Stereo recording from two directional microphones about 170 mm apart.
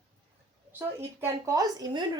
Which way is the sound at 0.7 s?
15° right (ahead or behind).